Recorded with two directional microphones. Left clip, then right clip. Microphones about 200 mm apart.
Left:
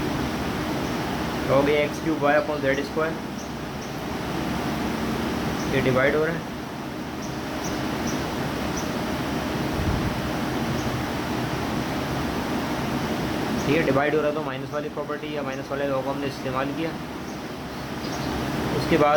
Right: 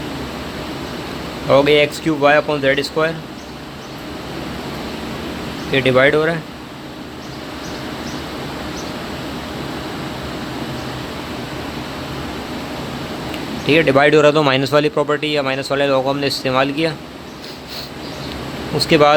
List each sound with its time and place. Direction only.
1.6 s speech: 60° right (ahead or behind)
5.7 s speech: 60° right (ahead or behind)
13.7 s speech: 60° right (ahead or behind)
18.9 s speech: 60° right (ahead or behind)